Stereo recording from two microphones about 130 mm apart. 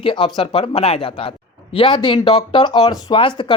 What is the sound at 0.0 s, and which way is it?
Speech, 40° left (ahead or behind).